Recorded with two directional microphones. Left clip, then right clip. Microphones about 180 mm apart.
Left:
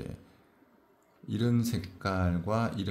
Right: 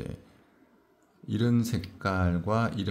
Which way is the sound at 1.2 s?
20° right (ahead or behind).